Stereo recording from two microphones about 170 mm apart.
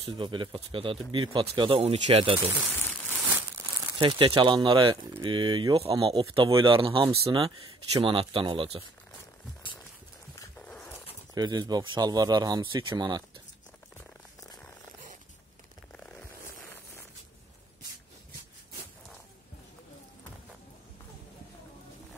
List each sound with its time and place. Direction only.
0.0 s speech: 30° right (ahead or behind)
3.2 s crumpling: 10° right (ahead or behind)
4.0 s speech: 30° right (ahead or behind)
10.6 s dog: 10° left (ahead or behind)
11.3 s speech: 25° right (ahead or behind)
16.0 s zipper: 10° left (ahead or behind)